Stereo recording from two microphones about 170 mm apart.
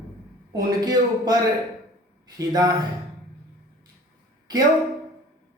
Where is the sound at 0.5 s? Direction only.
25° right (ahead or behind).